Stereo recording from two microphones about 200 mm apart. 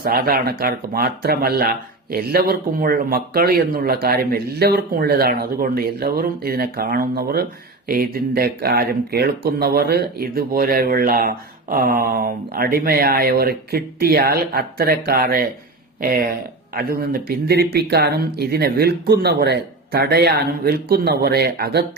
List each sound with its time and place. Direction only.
0.0 s speech: 50° right (ahead or behind)